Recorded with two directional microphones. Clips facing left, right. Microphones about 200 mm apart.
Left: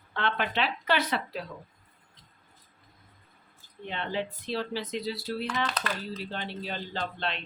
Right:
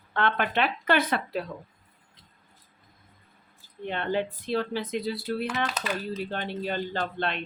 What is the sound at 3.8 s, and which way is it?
Speech, 55° right (ahead or behind).